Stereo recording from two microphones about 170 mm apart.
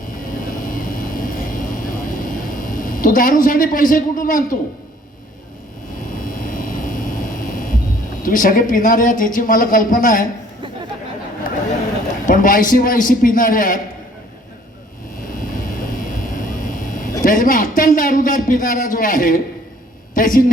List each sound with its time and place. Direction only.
0.7 s vehicle: 55° left (ahead or behind)
6.2 s vehicle: 55° left (ahead or behind)
8.2 s a man's voice: 50° left (ahead or behind)
12.2 s a man's voice: 50° left (ahead or behind)
16.1 s vehicle: 50° left (ahead or behind)
17.2 s a man's voice: 50° left (ahead or behind)